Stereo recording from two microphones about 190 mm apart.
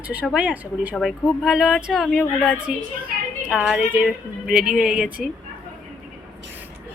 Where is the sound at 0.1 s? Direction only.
5° right (ahead or behind).